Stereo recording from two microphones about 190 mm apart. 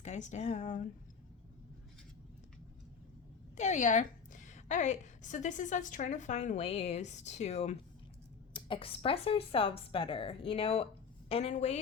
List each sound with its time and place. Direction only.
0.0 s a woman's voice: 40° left (ahead or behind)
3.6 s a woman's voice: 40° left (ahead or behind)